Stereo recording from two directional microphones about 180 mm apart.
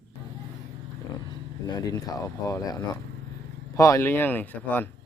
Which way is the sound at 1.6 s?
20° left (ahead or behind).